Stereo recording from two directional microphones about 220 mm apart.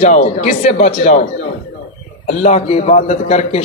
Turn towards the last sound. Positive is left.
turn(degrees=30)  # may be behind; listen again after turning